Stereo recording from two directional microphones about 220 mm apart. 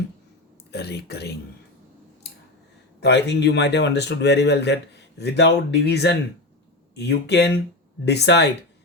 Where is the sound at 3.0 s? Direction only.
50° left (ahead or behind).